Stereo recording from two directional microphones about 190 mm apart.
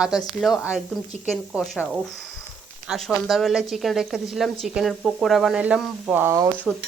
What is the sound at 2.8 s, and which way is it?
A woman's voice, 5° right (ahead or behind).